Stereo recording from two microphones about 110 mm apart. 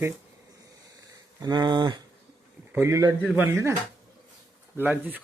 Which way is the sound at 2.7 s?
25° right (ahead or behind).